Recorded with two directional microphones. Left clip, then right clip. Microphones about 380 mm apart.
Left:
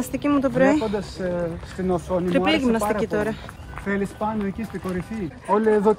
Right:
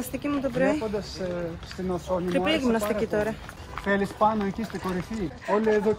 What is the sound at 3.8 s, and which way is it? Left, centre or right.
Speech, centre.